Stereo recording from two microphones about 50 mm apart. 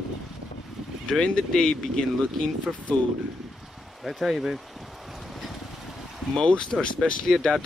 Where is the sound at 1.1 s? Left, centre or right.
Centre.